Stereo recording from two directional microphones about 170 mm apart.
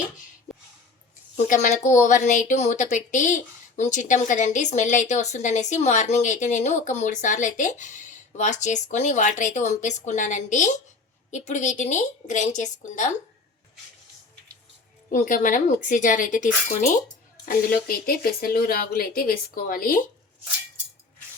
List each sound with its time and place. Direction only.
1.5 s speech: 45° left (ahead or behind)
15.1 s speech: 50° left (ahead or behind)